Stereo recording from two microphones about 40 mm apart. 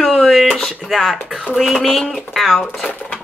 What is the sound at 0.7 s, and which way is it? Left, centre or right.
Speech, centre.